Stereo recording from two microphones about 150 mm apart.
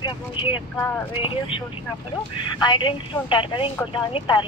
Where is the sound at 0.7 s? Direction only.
15° left (ahead or behind).